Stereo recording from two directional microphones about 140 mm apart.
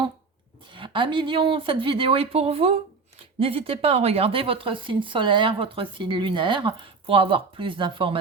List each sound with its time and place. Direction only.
0.7 s speech: 35° right (ahead or behind)